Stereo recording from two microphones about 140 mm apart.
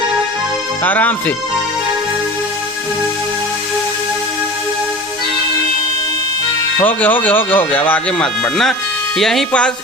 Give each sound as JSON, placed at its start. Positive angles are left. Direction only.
{"t": 0.9, "sound": "speech", "side_deg": 10}
{"t": 6.7, "sound": "speech", "side_deg": 15}